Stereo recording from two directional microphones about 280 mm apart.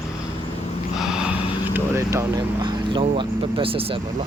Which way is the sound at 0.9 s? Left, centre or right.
Centre.